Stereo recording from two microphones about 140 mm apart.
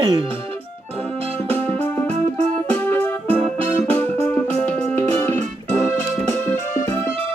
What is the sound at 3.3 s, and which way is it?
Music, 45° right (ahead or behind).